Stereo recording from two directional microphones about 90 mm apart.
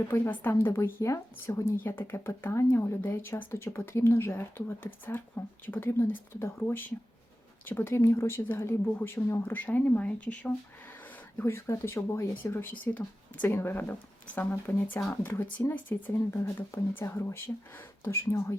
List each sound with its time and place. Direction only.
0.1 s speech: 20° left (ahead or behind)
11.3 s speech: 30° left (ahead or behind)